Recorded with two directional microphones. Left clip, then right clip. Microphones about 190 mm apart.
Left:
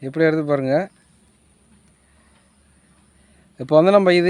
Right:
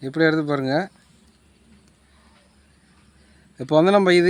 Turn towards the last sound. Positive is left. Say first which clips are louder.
# left 2 dB
turn(degrees=30)  # may be behind; listen again after turning